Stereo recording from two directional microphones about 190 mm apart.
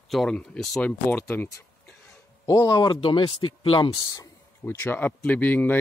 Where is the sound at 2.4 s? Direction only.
20° left (ahead or behind).